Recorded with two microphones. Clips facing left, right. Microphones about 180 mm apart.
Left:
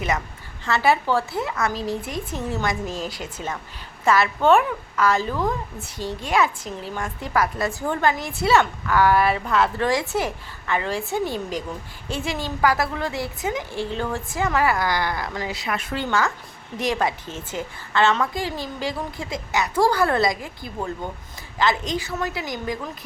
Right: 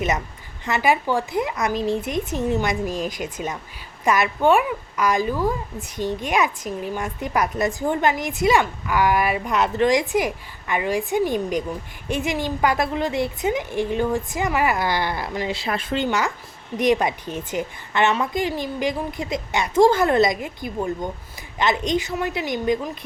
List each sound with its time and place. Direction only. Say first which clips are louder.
0.6 s a woman's voice: even; 15° right (ahead or behind)
15.4 s a woman's voice: right 3 dB; 30° right (ahead or behind)
16.0 s a woman's voice: even; 15° right (ahead or behind)